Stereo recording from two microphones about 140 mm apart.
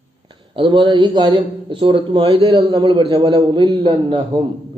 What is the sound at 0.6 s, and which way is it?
Speech, 35° right (ahead or behind).